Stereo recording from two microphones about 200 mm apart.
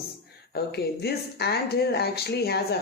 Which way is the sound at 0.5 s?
55° left (ahead or behind).